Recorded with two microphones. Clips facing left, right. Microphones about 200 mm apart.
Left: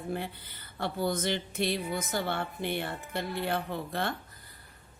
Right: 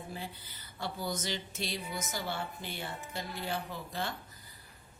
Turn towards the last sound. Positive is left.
turn(degrees=60)  # may be behind; listen again after turning